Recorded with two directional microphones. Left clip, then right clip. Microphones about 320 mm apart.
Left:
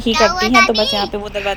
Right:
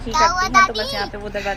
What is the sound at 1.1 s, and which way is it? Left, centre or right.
Speech, centre.